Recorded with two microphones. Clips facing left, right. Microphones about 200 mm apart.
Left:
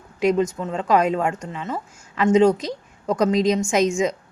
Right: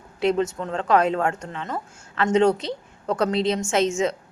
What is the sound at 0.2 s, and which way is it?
A woman's voice, 10° left (ahead or behind).